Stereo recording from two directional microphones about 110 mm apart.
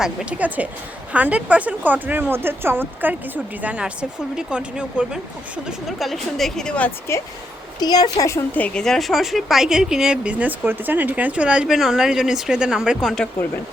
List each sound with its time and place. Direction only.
0.0 s a woman's voice: 5° right (ahead or behind); by 6.9 s 10° left (ahead or behind)
7.8 s a woman's voice: 35° left (ahead or behind)
8.5 s a woman's voice: 10° left (ahead or behind); by 13.1 s 5° right (ahead or behind)